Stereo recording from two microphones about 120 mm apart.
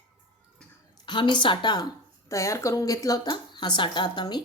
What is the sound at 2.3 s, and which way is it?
A woman's voice, 25° left (ahead or behind).